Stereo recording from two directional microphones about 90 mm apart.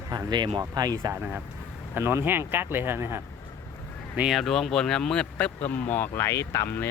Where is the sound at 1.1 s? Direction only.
15° right (ahead or behind).